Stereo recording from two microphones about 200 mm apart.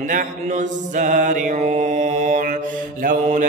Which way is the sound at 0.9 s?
40° right (ahead or behind).